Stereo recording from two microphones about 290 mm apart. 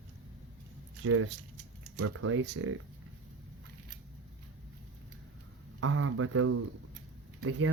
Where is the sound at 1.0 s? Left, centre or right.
Right.